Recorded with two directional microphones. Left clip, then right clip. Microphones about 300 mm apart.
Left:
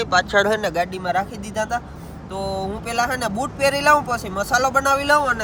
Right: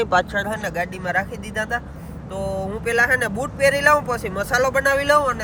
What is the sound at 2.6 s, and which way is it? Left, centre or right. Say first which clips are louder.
Speech: right 4 dB; centre.